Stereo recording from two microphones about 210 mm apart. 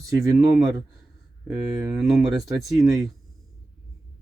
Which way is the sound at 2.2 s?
20° right (ahead or behind).